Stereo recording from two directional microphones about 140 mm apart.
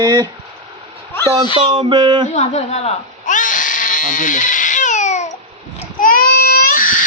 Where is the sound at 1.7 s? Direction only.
35° right (ahead or behind).